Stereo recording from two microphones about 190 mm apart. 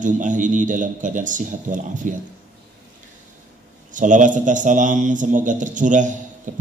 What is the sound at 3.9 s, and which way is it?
A man's voice, 40° right (ahead or behind).